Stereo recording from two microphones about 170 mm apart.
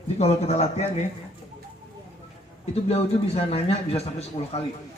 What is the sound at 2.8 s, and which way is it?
A man's voice, 35° left (ahead or behind).